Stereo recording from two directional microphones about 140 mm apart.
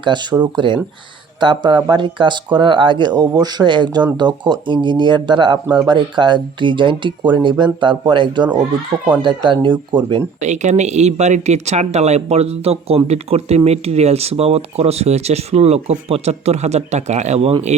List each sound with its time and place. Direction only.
0.0 s speech: 35° right (ahead or behind)
10.4 s speech: 55° right (ahead or behind)